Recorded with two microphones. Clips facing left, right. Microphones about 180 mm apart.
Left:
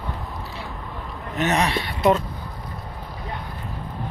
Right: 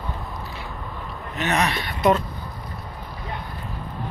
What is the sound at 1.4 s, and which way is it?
Speech, 30° left (ahead or behind).